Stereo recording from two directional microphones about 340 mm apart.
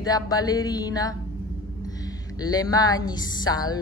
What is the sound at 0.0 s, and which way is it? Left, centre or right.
A woman's voice, centre.